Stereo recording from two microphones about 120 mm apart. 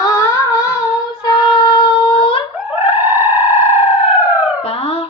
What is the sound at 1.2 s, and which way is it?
Female singing, 45° left (ahead or behind).